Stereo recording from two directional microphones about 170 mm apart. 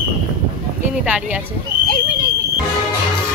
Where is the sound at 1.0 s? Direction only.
10° right (ahead or behind).